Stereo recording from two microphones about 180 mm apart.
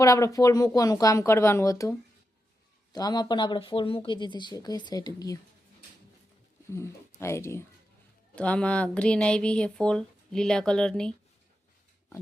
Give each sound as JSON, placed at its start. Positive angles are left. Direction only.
{"t": 0.0, "sound": "speech", "side_deg": 20}
{"t": 6.7, "sound": "speech", "side_deg": 15}